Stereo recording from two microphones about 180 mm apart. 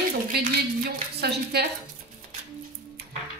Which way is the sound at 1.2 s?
65° right (ahead or behind).